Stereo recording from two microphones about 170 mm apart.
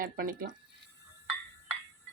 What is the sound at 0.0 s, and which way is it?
Speech, 55° right (ahead or behind).